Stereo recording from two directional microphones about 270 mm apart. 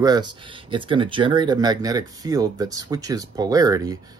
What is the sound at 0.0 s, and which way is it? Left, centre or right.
Speech, centre.